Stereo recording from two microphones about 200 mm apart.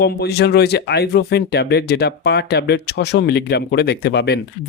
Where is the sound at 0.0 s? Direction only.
55° left (ahead or behind).